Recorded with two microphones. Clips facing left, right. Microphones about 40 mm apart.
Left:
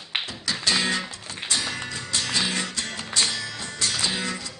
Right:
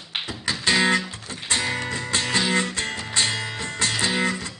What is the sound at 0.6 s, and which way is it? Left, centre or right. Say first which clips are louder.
Music: right 5 dB; right.